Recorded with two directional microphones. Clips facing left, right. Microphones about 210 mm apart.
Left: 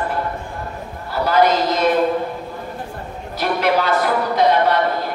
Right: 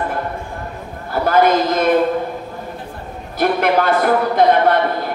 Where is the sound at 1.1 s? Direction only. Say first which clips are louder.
Right 2 dB; 50° right (ahead or behind).